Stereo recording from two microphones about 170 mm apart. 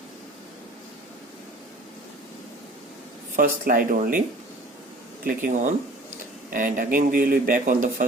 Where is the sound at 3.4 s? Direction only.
55° right (ahead or behind).